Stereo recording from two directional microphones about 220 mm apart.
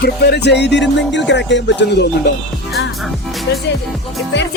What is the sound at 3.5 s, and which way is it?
Music, 50° left (ahead or behind).